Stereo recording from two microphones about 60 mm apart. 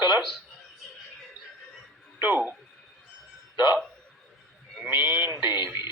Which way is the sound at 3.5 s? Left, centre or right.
Right.